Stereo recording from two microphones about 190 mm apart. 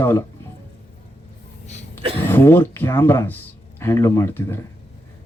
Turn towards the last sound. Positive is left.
turn(degrees=10)  # may be behind; listen again after turning